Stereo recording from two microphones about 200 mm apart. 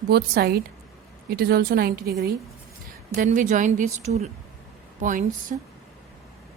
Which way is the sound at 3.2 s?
40° right (ahead or behind).